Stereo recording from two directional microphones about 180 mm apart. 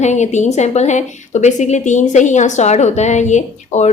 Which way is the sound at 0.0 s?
40° left (ahead or behind).